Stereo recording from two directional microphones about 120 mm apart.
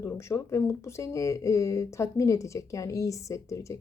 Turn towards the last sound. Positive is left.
turn(degrees=25)  # may be behind; listen again after turning